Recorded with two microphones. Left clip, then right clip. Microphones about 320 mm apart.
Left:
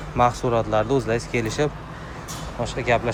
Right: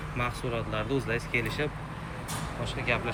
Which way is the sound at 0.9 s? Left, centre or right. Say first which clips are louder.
Left 8 dB; centre.